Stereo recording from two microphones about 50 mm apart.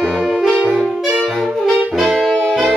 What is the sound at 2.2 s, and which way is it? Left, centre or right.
Brass instrument, centre.